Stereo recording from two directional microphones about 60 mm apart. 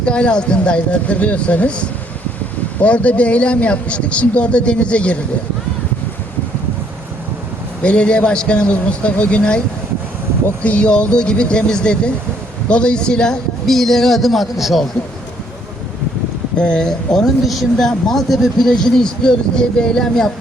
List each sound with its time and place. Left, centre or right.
0.0 s a man's voice: centre
7.8 s speech: centre
10.6 s a man's voice: left; by 14.8 s centre
16.6 s speech: centre
17.4 s speech: centre